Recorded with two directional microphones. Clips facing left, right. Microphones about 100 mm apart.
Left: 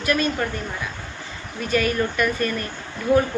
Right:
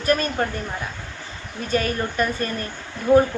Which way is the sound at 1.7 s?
35° right (ahead or behind).